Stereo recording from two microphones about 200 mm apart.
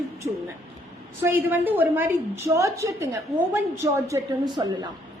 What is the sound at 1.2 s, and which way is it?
A woman's voice, 10° right (ahead or behind).